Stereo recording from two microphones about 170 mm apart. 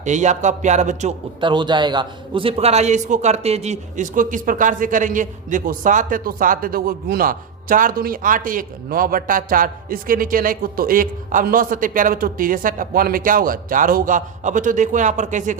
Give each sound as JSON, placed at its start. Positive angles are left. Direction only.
{"t": 0.0, "sound": "a man's voice", "side_deg": -45}
{"t": 1.4, "sound": "a man's voice", "side_deg": -30}